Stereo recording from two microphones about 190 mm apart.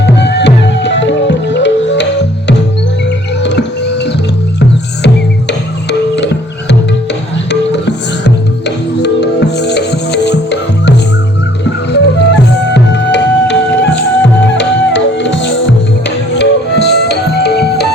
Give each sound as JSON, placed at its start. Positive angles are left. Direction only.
{"t": 0.0, "sound": "music", "side_deg": 65}
{"t": 3.4, "sound": "music", "side_deg": 65}